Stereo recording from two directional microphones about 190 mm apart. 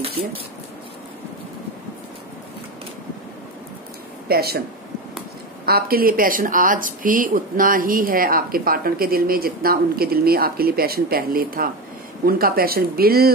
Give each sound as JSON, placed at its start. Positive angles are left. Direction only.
{"t": 4.3, "sound": "speech", "side_deg": -55}
{"t": 5.7, "sound": "speech", "side_deg": -50}